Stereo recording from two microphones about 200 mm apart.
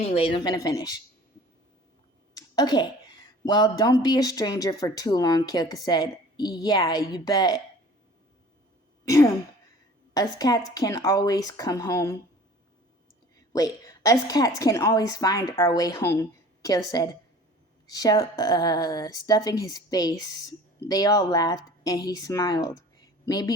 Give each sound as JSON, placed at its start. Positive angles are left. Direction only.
{"t": 0.1, "sound": "speech", "side_deg": 25}
{"t": 2.3, "sound": "a sound", "side_deg": 20}
{"t": 3.4, "sound": "speech", "side_deg": 20}
{"t": 9.0, "sound": "a woman's voice", "side_deg": 15}
{"t": 13.5, "sound": "a woman's voice", "side_deg": 20}